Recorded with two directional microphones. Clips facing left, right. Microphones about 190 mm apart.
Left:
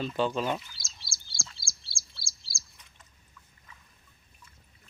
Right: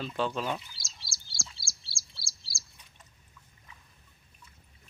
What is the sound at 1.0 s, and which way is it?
Frog, 40° right (ahead or behind).